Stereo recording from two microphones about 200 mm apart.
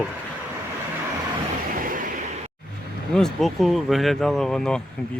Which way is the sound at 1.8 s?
45° right (ahead or behind).